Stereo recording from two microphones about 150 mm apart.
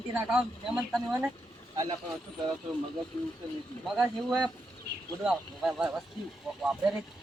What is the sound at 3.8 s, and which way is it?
A man's voice, centre (ahead or behind).